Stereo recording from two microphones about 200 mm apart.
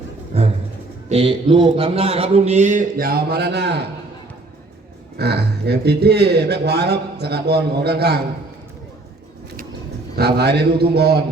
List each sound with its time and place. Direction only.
0.3 s music: 30° right (ahead or behind)
1.1 s a man's voice: 25° right (ahead or behind); by 3.8 s 60° right (ahead or behind)
5.1 s a man's voice: 55° right (ahead or behind)
10.2 s a man's voice: 55° right (ahead or behind)